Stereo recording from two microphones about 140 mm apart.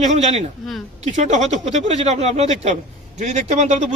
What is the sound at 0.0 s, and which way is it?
A man's voice, 55° right (ahead or behind).